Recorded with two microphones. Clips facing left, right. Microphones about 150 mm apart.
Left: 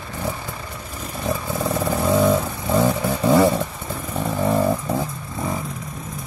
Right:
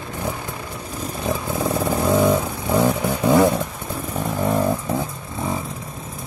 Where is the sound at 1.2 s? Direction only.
15° right (ahead or behind); by 5.0 s centre (ahead or behind).